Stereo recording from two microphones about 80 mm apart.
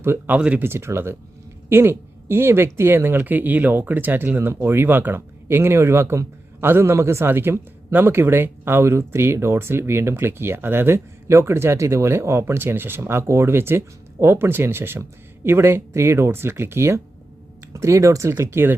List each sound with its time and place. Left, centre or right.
0.0 s speech: right
0.3 s speech: centre
0.7 s speech: right